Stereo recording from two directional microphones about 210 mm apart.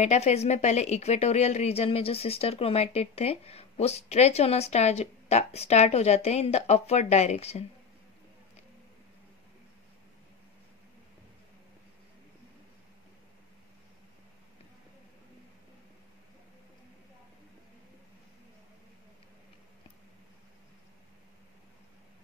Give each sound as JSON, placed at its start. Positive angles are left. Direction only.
{"t": 0.0, "sound": "a woman's voice", "side_deg": 30}